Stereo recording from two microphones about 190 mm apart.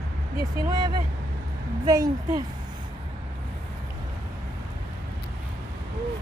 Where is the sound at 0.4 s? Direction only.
20° right (ahead or behind).